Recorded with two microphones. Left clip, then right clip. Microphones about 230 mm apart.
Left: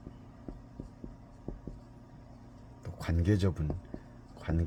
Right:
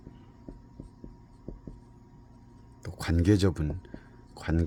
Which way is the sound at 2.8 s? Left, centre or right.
Right.